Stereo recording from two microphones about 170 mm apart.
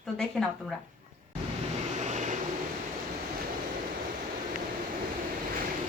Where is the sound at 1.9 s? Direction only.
45° right (ahead or behind).